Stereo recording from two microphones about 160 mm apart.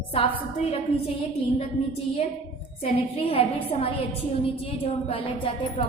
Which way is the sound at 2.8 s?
35° left (ahead or behind).